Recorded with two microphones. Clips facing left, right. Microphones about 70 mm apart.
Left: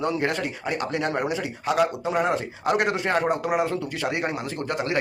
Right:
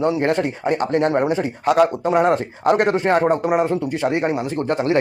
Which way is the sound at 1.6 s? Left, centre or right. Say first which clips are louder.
Right 7 dB; right.